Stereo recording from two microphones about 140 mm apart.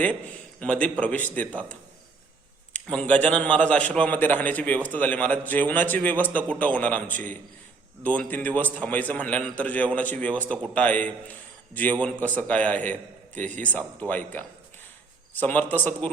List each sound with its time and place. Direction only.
0.6 s a man's voice: 10° left (ahead or behind)
15.3 s a man's voice: 10° left (ahead or behind)